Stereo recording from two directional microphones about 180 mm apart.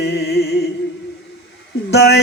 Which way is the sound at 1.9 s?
65° left (ahead or behind).